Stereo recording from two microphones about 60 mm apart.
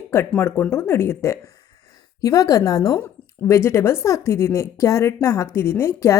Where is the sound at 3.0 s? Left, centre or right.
Left.